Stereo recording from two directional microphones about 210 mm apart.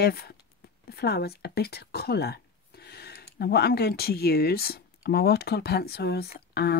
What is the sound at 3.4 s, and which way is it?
Speech, 50° left (ahead or behind).